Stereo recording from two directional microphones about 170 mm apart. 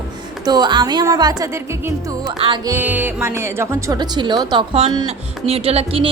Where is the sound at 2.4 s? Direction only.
30° right (ahead or behind).